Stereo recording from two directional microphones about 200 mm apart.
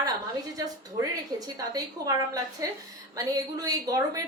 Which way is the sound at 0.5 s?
15° right (ahead or behind).